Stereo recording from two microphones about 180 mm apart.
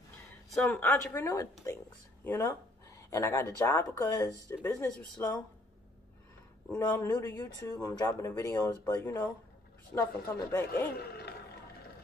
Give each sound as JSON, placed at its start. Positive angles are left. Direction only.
{"t": 0.5, "sound": "speech", "side_deg": 5}
{"t": 6.7, "sound": "speech", "side_deg": 15}